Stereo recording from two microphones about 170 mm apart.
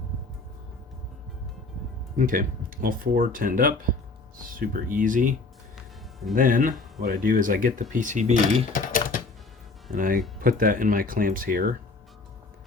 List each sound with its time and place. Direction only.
2.1 s speech: 55° right (ahead or behind)
5.7 s music: centre (ahead or behind)
6.3 s speech: 55° right (ahead or behind)
8.7 s typing: 55° left (ahead or behind)
9.9 s speech: 55° right (ahead or behind)